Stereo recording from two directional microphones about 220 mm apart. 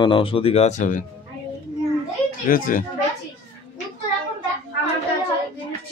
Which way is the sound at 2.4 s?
40° left (ahead or behind).